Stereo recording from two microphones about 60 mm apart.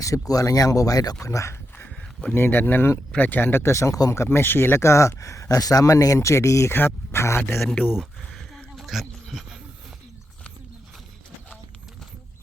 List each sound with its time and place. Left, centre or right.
0.3 s speech: left
1.2 s speech: left
2.3 s speech: left
4.1 s speech: left
6.1 s speech: left
6.7 s speech: left
8.2 s a sound: centre